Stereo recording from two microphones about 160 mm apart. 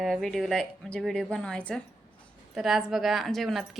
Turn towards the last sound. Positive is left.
turn(degrees=0)  # may be behind; listen again after turning